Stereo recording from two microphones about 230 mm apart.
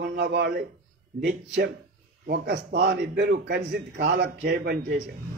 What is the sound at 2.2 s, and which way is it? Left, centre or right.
A man's voice, right.